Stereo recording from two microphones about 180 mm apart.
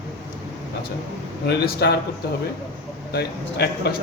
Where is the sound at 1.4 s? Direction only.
65° left (ahead or behind).